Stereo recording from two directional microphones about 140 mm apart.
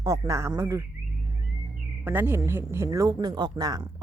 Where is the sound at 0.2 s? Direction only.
20° right (ahead or behind).